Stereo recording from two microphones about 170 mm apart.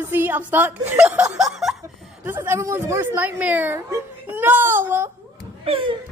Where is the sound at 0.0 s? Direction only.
15° right (ahead or behind).